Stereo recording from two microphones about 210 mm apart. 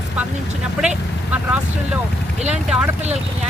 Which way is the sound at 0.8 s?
5° right (ahead or behind).